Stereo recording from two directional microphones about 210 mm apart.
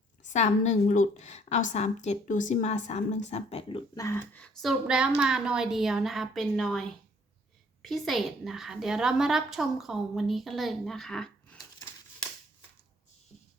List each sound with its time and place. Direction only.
0.2 s a woman's voice: 35° left (ahead or behind); by 11.3 s centre (ahead or behind)